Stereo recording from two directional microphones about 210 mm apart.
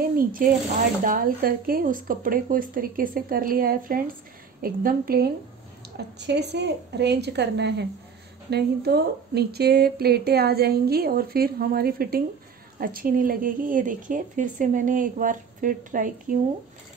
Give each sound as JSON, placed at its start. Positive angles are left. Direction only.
{"t": 0.0, "sound": "speech", "side_deg": -40}